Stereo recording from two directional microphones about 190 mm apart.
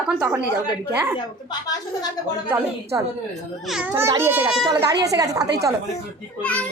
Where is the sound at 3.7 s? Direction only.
5° right (ahead or behind).